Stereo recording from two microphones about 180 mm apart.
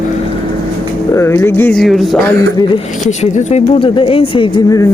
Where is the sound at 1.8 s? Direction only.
Centre (ahead or behind).